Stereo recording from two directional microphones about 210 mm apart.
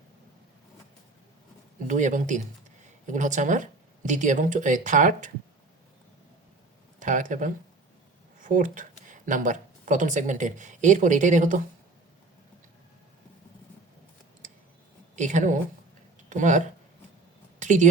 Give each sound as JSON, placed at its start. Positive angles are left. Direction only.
{"t": 1.9, "sound": "speech", "side_deg": -35}
{"t": 7.0, "sound": "speech", "side_deg": -40}
{"t": 15.1, "sound": "a woman's voice", "side_deg": -35}
{"t": 17.6, "sound": "a sound", "side_deg": -35}